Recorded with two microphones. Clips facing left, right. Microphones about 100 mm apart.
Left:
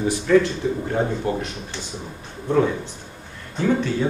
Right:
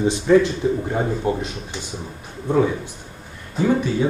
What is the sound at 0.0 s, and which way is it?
A man's voice, 20° right (ahead or behind).